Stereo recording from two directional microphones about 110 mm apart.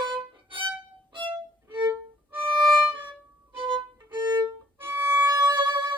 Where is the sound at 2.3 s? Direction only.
15° right (ahead or behind).